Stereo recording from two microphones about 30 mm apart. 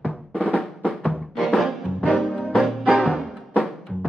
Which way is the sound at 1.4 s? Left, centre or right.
Centre.